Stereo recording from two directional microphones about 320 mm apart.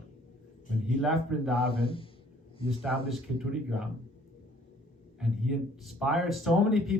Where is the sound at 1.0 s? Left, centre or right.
Centre.